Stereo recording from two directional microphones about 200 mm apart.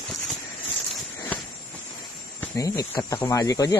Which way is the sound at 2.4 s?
15° left (ahead or behind).